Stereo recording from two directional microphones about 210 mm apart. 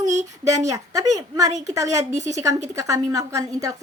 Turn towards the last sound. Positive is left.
turn(degrees=-15)  # may be behind; listen again after turning